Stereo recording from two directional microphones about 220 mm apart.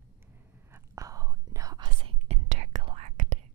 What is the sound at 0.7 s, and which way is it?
Whispering, 15° right (ahead or behind).